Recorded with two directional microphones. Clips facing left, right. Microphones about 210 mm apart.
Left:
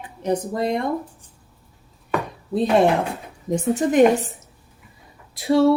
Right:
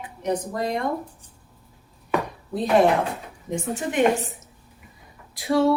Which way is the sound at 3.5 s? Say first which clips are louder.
Left 7 dB; 40° left (ahead or behind).